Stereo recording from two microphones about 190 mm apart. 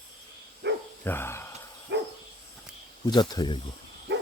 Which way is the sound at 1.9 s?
70° right (ahead or behind).